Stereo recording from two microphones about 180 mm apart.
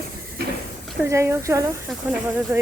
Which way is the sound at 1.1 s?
15° right (ahead or behind).